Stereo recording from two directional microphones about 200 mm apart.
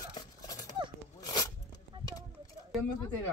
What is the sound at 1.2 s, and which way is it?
Zipper, 20° left (ahead or behind).